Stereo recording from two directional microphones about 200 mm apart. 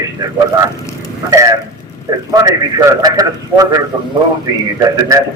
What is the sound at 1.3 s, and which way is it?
A man's voice, 15° right (ahead or behind).